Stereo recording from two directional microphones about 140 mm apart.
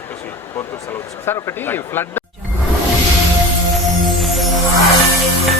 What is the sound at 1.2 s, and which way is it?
A man's voice, 15° left (ahead or behind).